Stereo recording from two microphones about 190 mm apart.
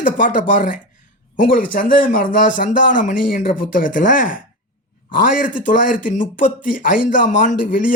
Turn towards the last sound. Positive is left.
turn(degrees=45)  # may be behind; listen again after turning